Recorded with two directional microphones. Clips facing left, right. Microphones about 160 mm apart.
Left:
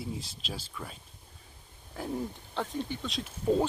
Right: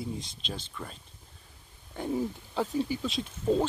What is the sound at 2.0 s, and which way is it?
Speech, centre (ahead or behind).